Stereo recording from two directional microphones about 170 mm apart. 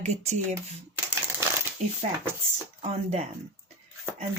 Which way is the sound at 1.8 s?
40° right (ahead or behind).